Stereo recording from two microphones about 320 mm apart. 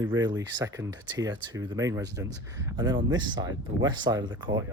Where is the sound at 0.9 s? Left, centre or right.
Right.